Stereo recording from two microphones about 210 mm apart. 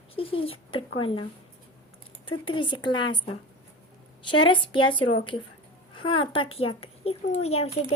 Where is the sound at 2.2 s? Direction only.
25° left (ahead or behind).